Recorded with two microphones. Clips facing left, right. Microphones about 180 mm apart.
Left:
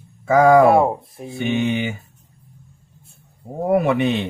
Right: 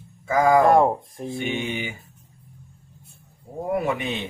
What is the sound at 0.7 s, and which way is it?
Speech, 5° left (ahead or behind).